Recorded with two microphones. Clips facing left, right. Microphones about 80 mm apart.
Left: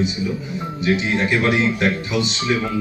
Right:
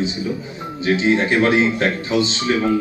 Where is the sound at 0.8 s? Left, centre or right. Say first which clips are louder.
Right 3 dB; right.